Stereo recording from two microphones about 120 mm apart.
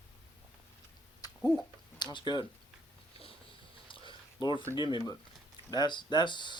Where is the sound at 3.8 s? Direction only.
45° left (ahead or behind).